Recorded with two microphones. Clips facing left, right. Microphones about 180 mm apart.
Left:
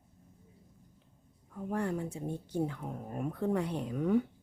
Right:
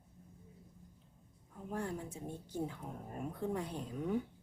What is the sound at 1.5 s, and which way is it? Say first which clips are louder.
Speech: left 7 dB; 70° left (ahead or behind).